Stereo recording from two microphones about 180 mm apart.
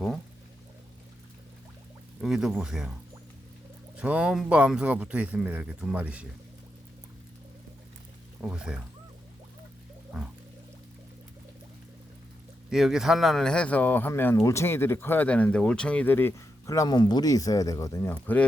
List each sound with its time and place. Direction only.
2.2 s speech: centre (ahead or behind)
3.9 s speech: 5° right (ahead or behind)
8.4 s speech: 5° right (ahead or behind)
12.7 s speech: centre (ahead or behind)